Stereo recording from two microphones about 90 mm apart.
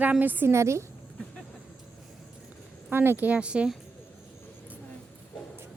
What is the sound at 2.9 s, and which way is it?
Speech, 25° right (ahead or behind).